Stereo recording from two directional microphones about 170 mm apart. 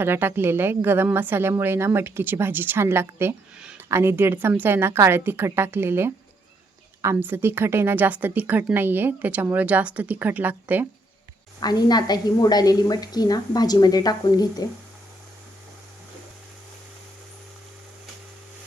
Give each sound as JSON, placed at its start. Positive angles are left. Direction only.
{"t": 0.0, "sound": "a woman's voice", "side_deg": -15}
{"t": 11.6, "sound": "a woman's voice", "side_deg": 25}